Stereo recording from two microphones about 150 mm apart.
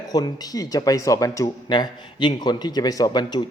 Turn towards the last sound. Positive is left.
turn(degrees=30)  # may be behind; listen again after turning